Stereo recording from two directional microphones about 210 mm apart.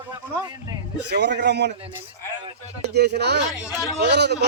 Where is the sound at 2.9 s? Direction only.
50° right (ahead or behind).